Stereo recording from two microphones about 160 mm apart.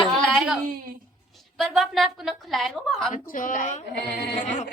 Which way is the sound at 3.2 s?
55° left (ahead or behind).